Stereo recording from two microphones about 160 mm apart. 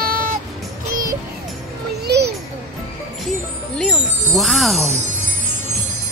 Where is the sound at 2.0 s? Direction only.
90° right.